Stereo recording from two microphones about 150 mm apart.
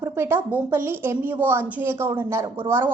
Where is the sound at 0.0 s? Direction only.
15° right (ahead or behind).